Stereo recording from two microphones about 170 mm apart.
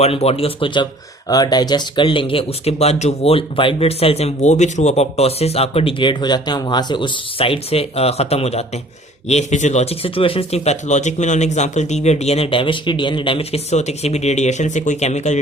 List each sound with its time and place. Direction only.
0.0 s speech: 35° left (ahead or behind)